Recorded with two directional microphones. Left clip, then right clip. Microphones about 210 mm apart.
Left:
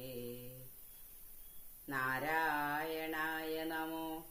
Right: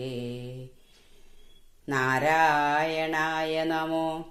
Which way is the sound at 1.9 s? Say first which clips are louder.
Right 13 dB; 45° right (ahead or behind).